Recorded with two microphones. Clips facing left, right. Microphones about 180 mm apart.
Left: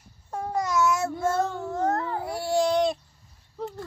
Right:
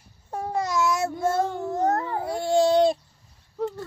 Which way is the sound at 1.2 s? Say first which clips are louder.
Right 3 dB; 10° right (ahead or behind).